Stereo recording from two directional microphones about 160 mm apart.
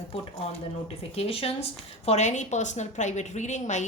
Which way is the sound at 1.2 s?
35° left (ahead or behind).